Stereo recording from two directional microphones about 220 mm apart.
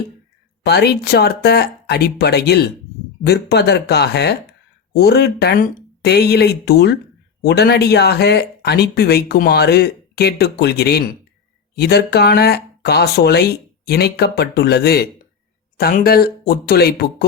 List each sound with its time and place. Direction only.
0.6 s speech: 45° left (ahead or behind)